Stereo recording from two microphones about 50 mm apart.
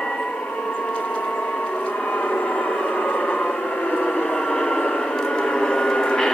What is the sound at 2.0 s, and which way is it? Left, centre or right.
Train, left.